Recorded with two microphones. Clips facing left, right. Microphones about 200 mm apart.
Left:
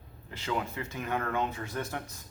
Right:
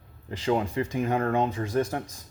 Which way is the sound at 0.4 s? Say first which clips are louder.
Right 8 dB; 30° right (ahead or behind).